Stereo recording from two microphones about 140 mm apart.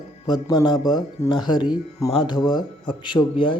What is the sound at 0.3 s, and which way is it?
Speech, 30° left (ahead or behind).